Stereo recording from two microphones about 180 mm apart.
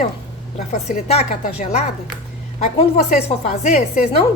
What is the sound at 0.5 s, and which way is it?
Speech, 40° left (ahead or behind).